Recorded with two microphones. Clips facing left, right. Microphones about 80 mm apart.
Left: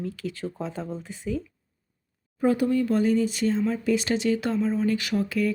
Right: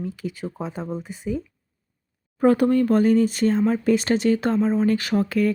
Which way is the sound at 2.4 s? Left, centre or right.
Right.